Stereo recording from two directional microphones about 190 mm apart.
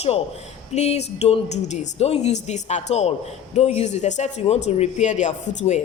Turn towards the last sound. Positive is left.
turn(degrees=40)  # may be behind; listen again after turning